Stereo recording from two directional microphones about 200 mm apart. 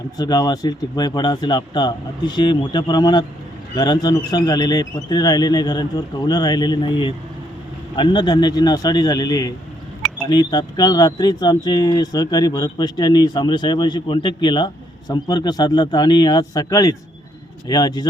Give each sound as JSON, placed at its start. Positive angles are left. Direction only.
{"t": 0.2, "sound": "speech", "side_deg": 20}